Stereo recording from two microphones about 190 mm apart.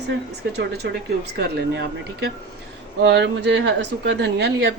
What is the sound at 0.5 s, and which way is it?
A woman's voice, 60° right (ahead or behind).